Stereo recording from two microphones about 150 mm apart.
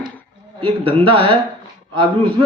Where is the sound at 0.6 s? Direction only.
40° right (ahead or behind).